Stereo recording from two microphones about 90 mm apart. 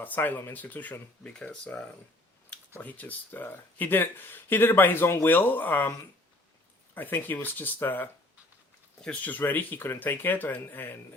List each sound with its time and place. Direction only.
0.0 s speech: 20° left (ahead or behind)
6.9 s speech: 20° left (ahead or behind)